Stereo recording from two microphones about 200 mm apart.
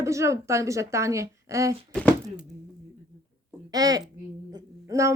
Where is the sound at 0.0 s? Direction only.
15° right (ahead or behind).